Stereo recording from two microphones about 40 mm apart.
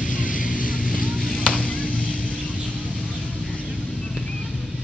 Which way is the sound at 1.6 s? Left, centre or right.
Left.